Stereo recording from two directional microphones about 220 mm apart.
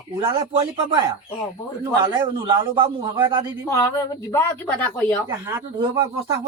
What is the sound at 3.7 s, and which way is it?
A woman's voice, 15° left (ahead or behind).